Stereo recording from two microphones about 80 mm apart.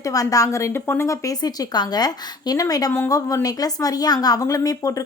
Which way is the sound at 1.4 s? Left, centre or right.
Left.